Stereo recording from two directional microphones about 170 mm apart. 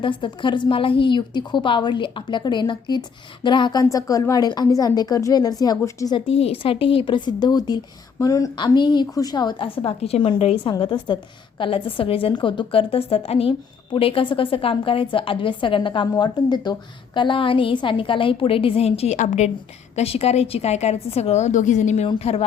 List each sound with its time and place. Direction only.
0.0 s a woman's voice: 30° left (ahead or behind)
6.1 s a woman's voice: 35° left (ahead or behind)